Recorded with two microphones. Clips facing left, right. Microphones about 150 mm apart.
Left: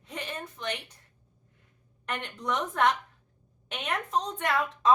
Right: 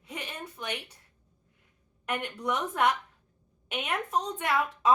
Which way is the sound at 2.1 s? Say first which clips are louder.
Right 1 dB; 10° right (ahead or behind).